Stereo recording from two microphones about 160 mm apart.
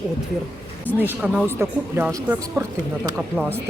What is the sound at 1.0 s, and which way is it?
Speech, 10° right (ahead or behind).